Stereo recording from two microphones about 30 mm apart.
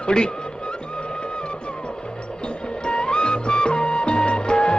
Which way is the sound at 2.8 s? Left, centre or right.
Left.